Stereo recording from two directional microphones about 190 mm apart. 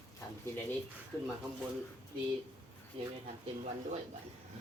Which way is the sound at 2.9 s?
30° right (ahead or behind).